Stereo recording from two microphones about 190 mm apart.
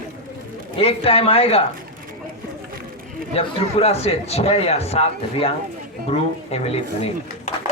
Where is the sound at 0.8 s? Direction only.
30° left (ahead or behind).